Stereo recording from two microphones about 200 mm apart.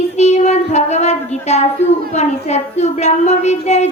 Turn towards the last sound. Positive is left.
turn(degrees=35)  # may be behind; listen again after turning